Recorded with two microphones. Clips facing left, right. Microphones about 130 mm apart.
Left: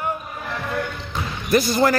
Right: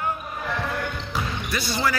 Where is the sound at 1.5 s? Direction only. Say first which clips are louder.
Left 9 dB; 45° left (ahead or behind).